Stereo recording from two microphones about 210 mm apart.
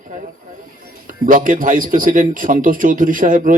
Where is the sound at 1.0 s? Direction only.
40° right (ahead or behind).